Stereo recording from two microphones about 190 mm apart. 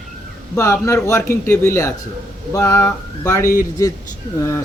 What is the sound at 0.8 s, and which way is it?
Speech, 15° left (ahead or behind).